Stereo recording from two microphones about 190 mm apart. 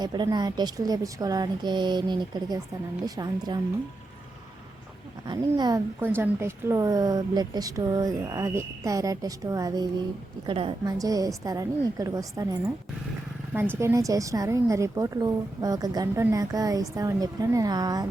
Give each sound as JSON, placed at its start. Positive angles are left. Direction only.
{"t": 0.0, "sound": "a woman's voice", "side_deg": -20}
{"t": 5.2, "sound": "a woman's voice", "side_deg": -20}